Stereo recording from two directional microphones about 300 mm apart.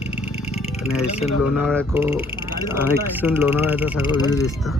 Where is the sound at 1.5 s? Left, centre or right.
Centre.